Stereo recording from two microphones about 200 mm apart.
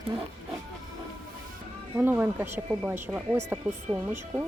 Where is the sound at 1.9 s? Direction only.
10° right (ahead or behind).